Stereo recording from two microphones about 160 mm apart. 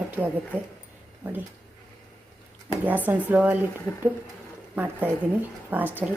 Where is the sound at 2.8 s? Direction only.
10° right (ahead or behind).